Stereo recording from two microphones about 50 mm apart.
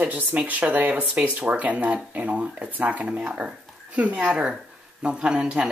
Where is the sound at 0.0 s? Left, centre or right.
Right.